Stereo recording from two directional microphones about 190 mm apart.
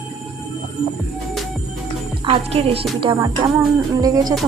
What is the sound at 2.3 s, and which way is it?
Speech, 30° right (ahead or behind).